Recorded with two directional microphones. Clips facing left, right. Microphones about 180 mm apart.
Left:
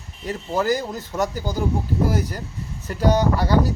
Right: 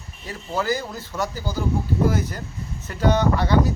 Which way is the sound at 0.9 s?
20° left (ahead or behind).